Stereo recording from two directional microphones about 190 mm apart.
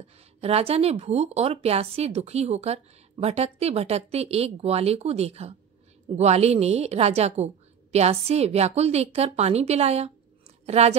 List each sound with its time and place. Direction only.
0.4 s a woman's voice: 35° right (ahead or behind)